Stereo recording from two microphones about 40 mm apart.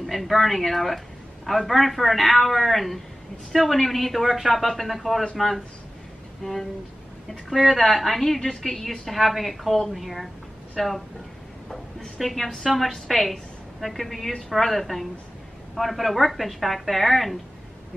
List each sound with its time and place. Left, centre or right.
0.0 s a man's voice: centre
6.4 s a woman's voice: centre
12.2 s a woman's voice: centre
12.4 s a woman's voice: centre
13.1 s a woman's voice: centre